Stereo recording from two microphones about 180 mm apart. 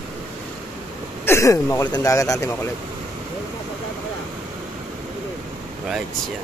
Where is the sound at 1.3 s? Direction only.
15° left (ahead or behind).